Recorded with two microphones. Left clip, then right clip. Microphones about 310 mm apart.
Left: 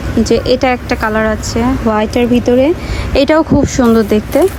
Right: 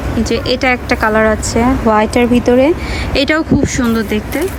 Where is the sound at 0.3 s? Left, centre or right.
Centre.